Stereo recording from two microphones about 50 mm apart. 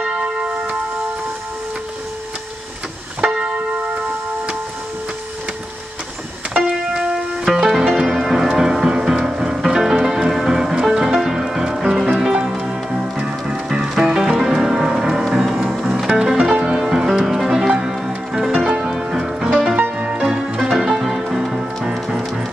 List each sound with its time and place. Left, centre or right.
0.0 s church bell: right
6.7 s music: centre
7.4 s music: centre
20.0 s music: right
20.2 s music: centre